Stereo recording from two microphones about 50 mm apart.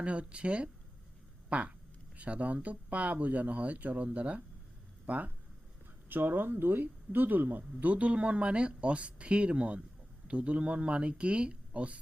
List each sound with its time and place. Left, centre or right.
0.0 s speech: right
1.5 s a sound: right
2.1 s speech: right
6.1 s speech: right